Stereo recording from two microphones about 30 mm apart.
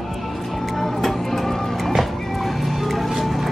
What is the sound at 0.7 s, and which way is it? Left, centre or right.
Music, centre.